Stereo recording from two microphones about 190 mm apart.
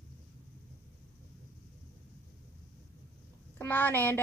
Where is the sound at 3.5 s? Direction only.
10° left (ahead or behind).